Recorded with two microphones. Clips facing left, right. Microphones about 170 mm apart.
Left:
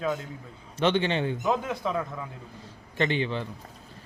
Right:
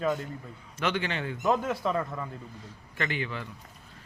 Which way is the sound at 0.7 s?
25° left (ahead or behind).